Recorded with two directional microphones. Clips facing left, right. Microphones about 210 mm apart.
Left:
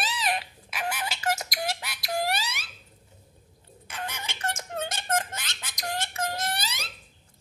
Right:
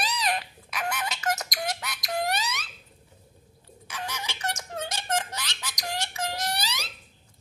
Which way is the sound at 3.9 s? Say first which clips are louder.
Right 1 dB; 55° left (ahead or behind).